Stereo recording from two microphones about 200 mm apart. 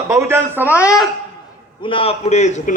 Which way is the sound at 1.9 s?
30° left (ahead or behind).